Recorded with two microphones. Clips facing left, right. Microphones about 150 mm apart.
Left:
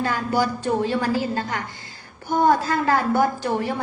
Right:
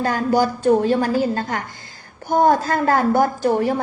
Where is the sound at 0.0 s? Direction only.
45° right (ahead or behind).